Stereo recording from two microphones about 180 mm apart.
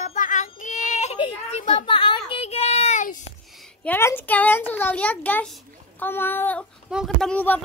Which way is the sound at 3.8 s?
10° left (ahead or behind).